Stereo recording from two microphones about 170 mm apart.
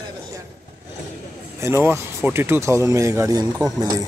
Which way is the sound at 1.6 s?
15° right (ahead or behind).